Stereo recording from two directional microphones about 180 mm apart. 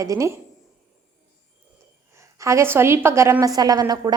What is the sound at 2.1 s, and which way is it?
A woman's voice, 15° right (ahead or behind).